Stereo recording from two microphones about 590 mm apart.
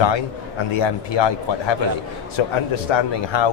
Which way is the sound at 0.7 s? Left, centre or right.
Left.